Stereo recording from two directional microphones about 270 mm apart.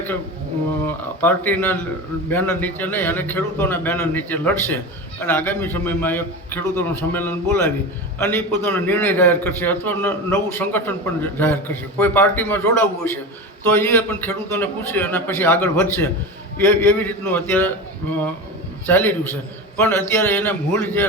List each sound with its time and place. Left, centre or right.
0.9 s a man's voice: centre
18.9 s a man's voice: centre